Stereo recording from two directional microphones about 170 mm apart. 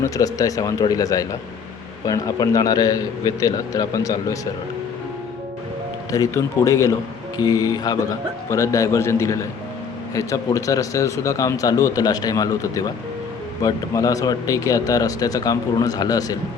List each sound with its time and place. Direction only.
0.0 s speech: 20° left (ahead or behind)
6.1 s a man's voice: 20° left (ahead or behind)